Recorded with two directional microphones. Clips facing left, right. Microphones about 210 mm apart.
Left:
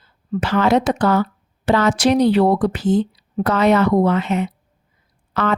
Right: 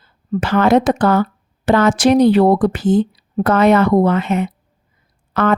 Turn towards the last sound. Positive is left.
turn(degrees=-50)  # may be behind; listen again after turning